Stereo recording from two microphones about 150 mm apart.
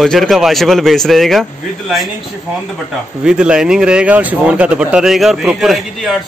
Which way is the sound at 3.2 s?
5° right (ahead or behind).